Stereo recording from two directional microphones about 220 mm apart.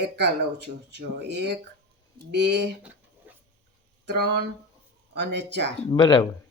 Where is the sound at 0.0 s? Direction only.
50° right (ahead or behind).